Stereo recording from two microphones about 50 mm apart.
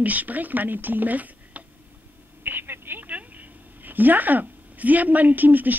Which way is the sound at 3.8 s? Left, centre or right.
Right.